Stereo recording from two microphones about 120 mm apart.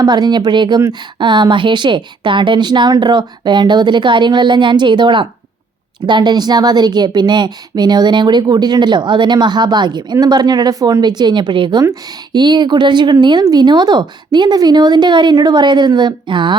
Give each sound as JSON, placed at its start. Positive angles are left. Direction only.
{"t": 0.0, "sound": "a woman's voice", "side_deg": -35}